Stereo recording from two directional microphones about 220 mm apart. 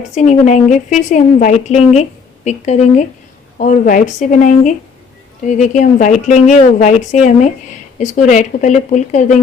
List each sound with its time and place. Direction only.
0.1 s a woman's voice: 30° left (ahead or behind)